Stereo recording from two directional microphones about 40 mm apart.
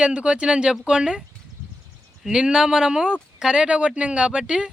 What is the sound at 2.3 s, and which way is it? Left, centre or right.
Speech, centre.